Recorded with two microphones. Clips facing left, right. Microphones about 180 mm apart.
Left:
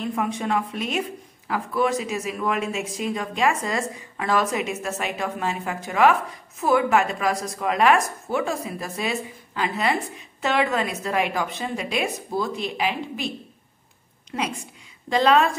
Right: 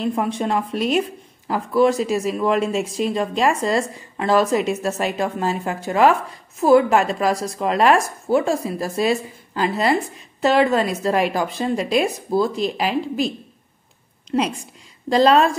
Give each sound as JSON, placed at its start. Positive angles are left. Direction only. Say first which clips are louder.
{"t": 0.0, "sound": "speech", "louder": "right 4 dB", "side_deg": -30}
{"t": 14.3, "sound": "speech", "louder": "right 7 dB", "side_deg": -30}